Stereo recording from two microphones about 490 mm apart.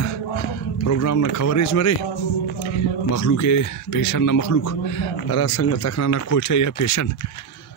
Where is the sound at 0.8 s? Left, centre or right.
Left.